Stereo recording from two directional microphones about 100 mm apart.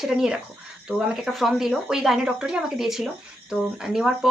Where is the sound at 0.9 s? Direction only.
5° right (ahead or behind).